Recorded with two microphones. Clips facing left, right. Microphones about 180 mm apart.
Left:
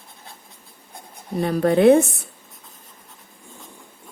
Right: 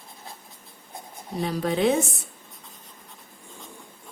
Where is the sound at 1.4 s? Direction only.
55° left (ahead or behind).